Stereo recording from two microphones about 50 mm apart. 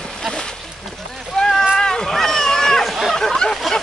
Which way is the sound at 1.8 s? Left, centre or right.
Centre.